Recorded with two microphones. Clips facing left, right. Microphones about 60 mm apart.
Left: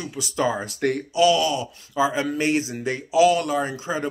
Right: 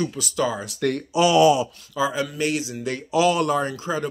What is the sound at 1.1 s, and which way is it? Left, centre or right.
Speech, centre.